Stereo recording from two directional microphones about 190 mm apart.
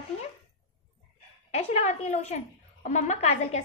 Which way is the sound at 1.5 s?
35° left (ahead or behind).